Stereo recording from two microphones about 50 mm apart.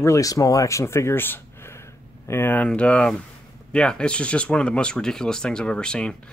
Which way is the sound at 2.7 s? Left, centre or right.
Left.